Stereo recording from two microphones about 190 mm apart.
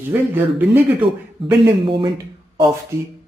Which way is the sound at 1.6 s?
30° right (ahead or behind).